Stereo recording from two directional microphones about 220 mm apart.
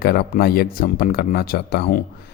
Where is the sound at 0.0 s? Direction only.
45° left (ahead or behind).